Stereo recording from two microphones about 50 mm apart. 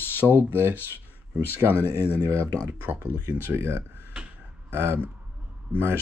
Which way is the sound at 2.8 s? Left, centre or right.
Right.